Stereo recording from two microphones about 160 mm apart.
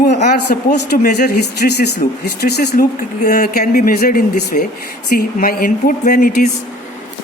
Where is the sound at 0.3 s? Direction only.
90° left.